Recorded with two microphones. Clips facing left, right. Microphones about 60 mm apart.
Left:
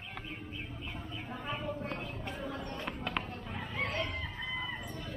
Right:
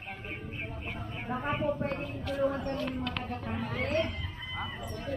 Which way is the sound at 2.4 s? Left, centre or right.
Right.